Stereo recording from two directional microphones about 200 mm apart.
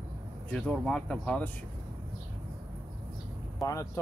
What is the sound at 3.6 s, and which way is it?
Speech, 15° left (ahead or behind).